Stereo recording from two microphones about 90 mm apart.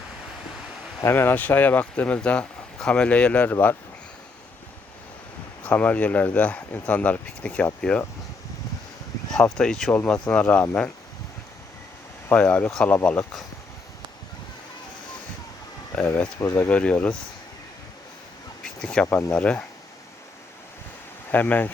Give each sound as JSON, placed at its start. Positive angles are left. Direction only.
{"t": 1.0, "sound": "speech", "side_deg": 25}
{"t": 5.6, "sound": "speech", "side_deg": 15}
{"t": 9.3, "sound": "speech", "side_deg": 5}
{"t": 12.3, "sound": "speech", "side_deg": 15}
{"t": 15.9, "sound": "speech", "side_deg": 5}
{"t": 18.6, "sound": "speech", "side_deg": 10}
{"t": 21.3, "sound": "speech", "side_deg": 20}